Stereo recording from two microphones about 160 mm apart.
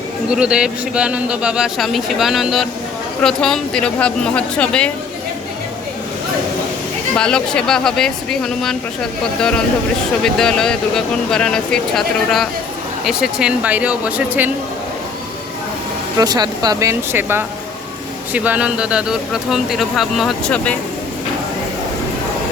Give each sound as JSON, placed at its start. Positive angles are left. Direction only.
{"t": 0.3, "sound": "speech", "side_deg": -5}
{"t": 7.2, "sound": "speech", "side_deg": 5}
{"t": 10.2, "sound": "speech", "side_deg": 5}
{"t": 16.1, "sound": "speech", "side_deg": -25}